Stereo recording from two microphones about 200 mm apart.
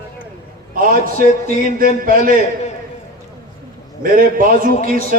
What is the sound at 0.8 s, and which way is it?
A man's voice, 45° right (ahead or behind).